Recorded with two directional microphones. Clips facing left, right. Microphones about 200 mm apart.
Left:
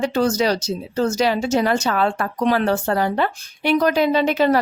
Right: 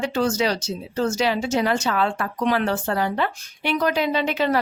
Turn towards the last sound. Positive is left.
turn(degrees=40)  # may be behind; listen again after turning